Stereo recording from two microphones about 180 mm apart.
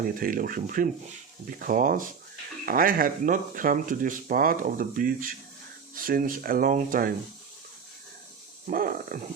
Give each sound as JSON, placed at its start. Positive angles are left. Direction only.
{"t": 0.2, "sound": "speech", "side_deg": -50}
{"t": 8.6, "sound": "speech", "side_deg": -50}